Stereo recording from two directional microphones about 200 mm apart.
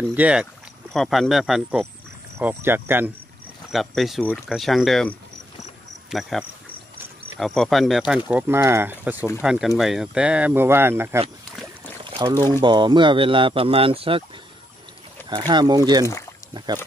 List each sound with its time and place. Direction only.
0.1 s speech: 5° right (ahead or behind)
3.7 s speech: centre (ahead or behind); by 14.2 s 25° right (ahead or behind)
15.2 s speech: 20° right (ahead or behind)